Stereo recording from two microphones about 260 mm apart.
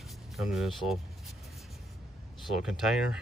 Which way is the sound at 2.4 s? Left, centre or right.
Centre.